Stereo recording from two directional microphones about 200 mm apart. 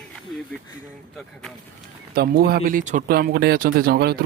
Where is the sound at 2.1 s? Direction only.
50° right (ahead or behind).